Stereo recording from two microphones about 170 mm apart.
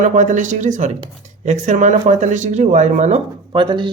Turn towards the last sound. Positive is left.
turn(degrees=-30)  # may be behind; listen again after turning